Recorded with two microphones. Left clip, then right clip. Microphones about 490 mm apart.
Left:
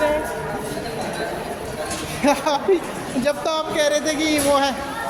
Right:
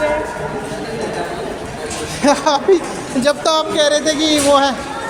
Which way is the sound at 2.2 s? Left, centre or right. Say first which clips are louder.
Right 5 dB; left.